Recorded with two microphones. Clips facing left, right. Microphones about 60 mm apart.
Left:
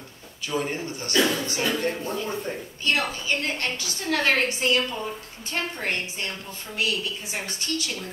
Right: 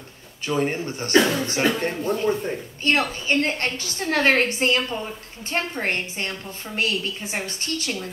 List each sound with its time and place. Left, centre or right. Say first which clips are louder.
0.5 s a woman's voice: right 4 dB; right